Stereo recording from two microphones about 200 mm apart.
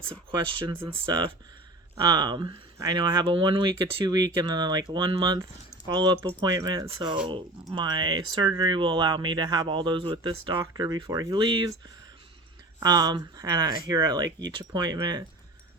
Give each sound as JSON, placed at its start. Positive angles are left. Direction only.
{"t": 0.3, "sound": "speech", "side_deg": -25}
{"t": 12.8, "sound": "speech", "side_deg": -20}